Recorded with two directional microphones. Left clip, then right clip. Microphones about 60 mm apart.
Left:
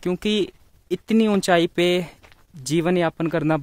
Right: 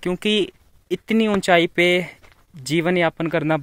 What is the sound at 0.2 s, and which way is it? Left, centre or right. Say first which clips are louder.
Speech: right 3 dB; centre.